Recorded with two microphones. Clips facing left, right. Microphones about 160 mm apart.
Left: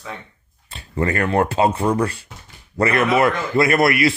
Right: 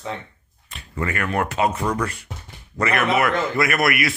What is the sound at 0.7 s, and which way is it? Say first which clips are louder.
A man's voice: left 5 dB; 30° left (ahead or behind).